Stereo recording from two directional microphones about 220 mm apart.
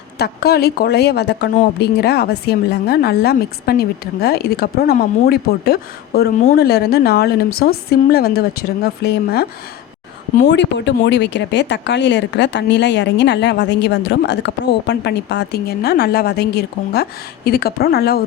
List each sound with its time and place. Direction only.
0.2 s speech: 45° left (ahead or behind)